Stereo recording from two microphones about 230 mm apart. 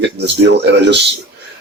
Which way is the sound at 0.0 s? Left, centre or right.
Right.